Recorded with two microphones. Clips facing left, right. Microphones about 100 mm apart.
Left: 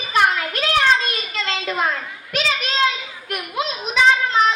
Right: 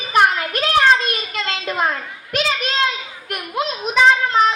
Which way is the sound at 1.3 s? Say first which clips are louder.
Left 1 dB; 45° right (ahead or behind).